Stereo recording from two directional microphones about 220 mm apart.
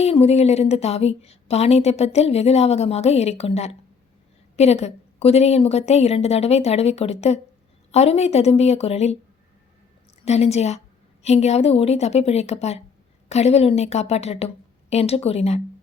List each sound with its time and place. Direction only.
0.0 s a woman's voice: 30° left (ahead or behind)
10.2 s a woman's voice: 30° left (ahead or behind)